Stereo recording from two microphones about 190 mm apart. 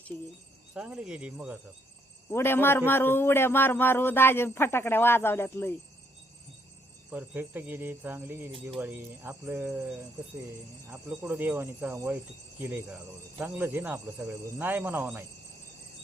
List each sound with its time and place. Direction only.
0.1 s speech: 20° right (ahead or behind)
0.7 s speech: 5° right (ahead or behind)
2.3 s a man's voice: 10° left (ahead or behind)
7.1 s cricket: 10° right (ahead or behind)